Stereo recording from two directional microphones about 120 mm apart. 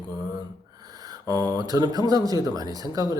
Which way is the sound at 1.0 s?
30° right (ahead or behind).